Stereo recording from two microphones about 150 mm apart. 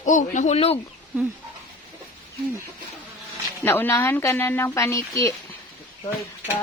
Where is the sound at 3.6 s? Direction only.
15° left (ahead or behind).